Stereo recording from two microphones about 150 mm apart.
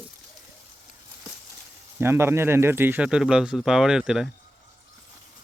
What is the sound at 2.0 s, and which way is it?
Speech, 15° right (ahead or behind).